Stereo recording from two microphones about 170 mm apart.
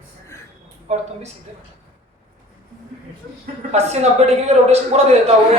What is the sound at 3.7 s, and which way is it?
A man's voice, 40° right (ahead or behind).